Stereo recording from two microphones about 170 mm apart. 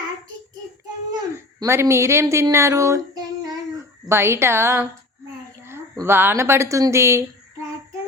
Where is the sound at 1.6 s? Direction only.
15° right (ahead or behind).